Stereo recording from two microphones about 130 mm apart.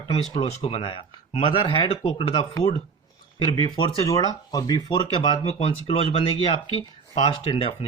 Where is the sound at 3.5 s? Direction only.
35° left (ahead or behind).